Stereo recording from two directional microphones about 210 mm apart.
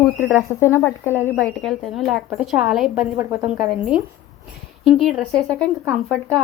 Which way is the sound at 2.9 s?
15° right (ahead or behind).